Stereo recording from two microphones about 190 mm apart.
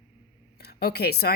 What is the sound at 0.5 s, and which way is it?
Speech, 55° left (ahead or behind).